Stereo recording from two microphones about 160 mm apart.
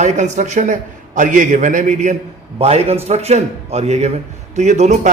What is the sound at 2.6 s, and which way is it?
A man's voice, 40° right (ahead or behind).